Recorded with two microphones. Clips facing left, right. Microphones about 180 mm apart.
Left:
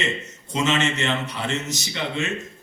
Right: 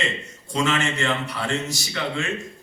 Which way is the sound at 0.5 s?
20° left (ahead or behind).